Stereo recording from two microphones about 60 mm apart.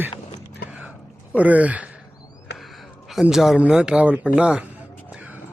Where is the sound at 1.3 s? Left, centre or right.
Right.